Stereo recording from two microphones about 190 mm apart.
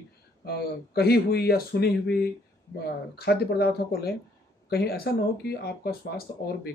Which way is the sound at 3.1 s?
55° left (ahead or behind).